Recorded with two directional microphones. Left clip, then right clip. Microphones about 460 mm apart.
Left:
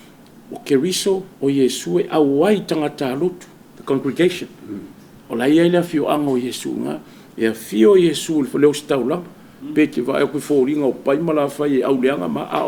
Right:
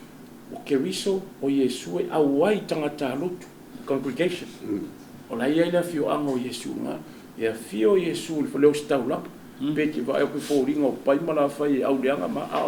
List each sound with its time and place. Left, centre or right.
0.6 s speech: left